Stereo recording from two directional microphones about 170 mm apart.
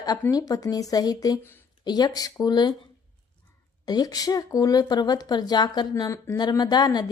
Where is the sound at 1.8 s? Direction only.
25° left (ahead or behind).